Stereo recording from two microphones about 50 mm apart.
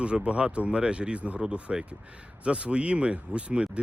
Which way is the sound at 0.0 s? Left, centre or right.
Right.